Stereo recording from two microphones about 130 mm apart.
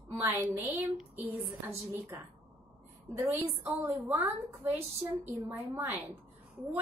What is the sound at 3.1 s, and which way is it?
A woman's voice, 15° right (ahead or behind).